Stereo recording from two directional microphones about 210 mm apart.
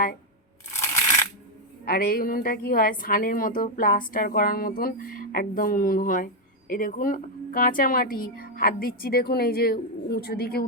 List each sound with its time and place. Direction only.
0.8 s crushing: 15° left (ahead or behind)
1.8 s a woman's voice: 45° left (ahead or behind)